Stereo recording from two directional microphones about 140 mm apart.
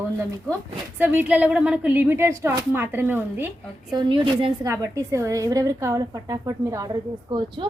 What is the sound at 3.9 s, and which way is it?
Speech, 40° right (ahead or behind).